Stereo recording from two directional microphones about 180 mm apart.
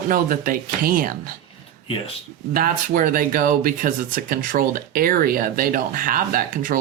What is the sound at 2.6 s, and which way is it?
Speech, 50° right (ahead or behind).